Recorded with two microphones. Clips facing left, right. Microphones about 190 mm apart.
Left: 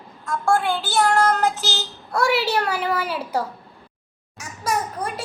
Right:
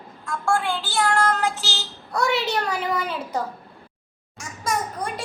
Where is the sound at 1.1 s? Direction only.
40° left (ahead or behind).